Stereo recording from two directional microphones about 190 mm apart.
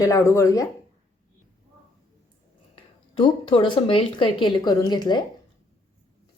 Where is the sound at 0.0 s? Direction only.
15° left (ahead or behind).